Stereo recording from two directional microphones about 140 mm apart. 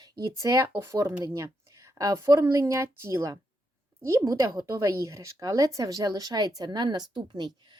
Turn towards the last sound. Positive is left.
turn(degrees=-30)  # may be behind; listen again after turning